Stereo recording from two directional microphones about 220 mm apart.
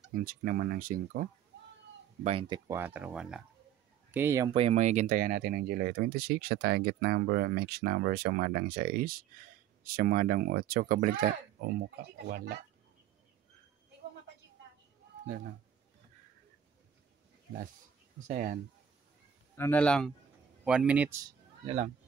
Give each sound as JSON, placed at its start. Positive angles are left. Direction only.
{"t": 0.1, "sound": "speech", "side_deg": -40}
{"t": 2.2, "sound": "speech", "side_deg": -25}
{"t": 4.6, "sound": "speech", "side_deg": -30}
{"t": 18.2, "sound": "speech", "side_deg": -35}
{"t": 19.5, "sound": "speech", "side_deg": 10}
{"t": 21.6, "sound": "speech", "side_deg": -30}